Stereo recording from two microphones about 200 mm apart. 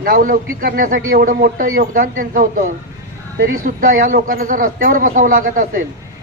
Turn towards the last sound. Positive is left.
turn(degrees=-40)  # may be behind; listen again after turning